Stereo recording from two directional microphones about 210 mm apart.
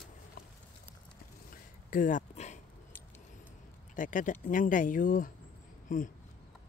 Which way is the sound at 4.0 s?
40° left (ahead or behind).